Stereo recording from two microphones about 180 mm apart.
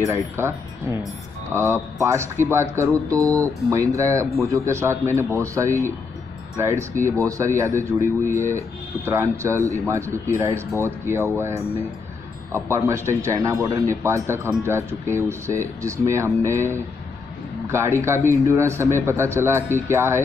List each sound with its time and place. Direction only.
0.1 s speech: 15° right (ahead or behind)
9.6 s speech: 15° left (ahead or behind)
9.8 s speech: 15° right (ahead or behind)